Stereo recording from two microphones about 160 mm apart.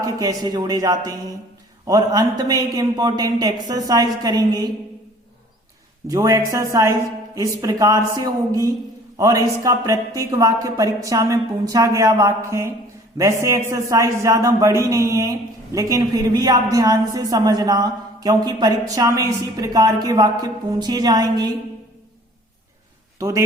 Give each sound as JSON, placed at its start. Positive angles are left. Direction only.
{"t": 0.0, "sound": "a man's voice", "side_deg": -20}
{"t": 6.1, "sound": "a man's voice", "side_deg": -20}
{"t": 23.1, "sound": "speech", "side_deg": -20}